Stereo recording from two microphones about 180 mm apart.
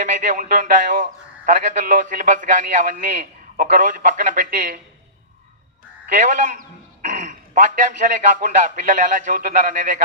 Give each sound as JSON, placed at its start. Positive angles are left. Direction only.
{"t": 0.0, "sound": "a man's voice", "side_deg": -45}
{"t": 6.1, "sound": "a man's voice", "side_deg": -45}